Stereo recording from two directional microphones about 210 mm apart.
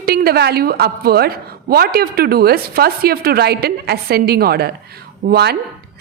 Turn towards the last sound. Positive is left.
turn(degrees=-50)  # may be behind; listen again after turning